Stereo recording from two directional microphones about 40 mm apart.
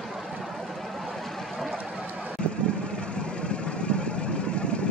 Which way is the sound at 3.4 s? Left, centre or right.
Left.